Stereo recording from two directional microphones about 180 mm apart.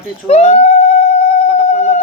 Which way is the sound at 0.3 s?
35° left (ahead or behind).